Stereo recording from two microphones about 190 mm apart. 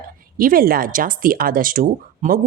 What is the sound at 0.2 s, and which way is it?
Speech, 50° right (ahead or behind).